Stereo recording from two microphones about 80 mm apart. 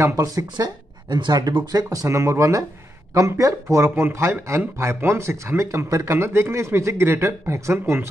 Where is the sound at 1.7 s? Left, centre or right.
Right.